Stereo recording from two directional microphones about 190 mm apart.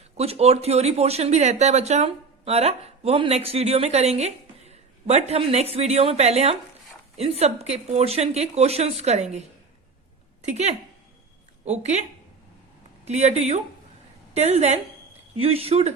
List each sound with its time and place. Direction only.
0.2 s speech: 35° right (ahead or behind)
10.4 s speech: 35° right (ahead or behind)
13.1 s speech: 35° right (ahead or behind)